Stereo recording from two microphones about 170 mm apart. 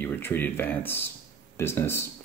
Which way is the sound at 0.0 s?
10° left (ahead or behind).